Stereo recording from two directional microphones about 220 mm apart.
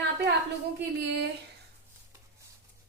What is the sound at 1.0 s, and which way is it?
Speech, 50° right (ahead or behind).